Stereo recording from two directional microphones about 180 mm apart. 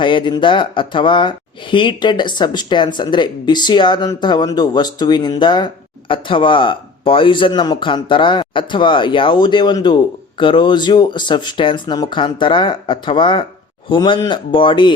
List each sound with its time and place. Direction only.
0.0 s speech: 25° left (ahead or behind)